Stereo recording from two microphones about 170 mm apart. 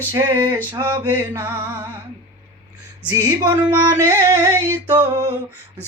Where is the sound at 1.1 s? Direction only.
10° right (ahead or behind).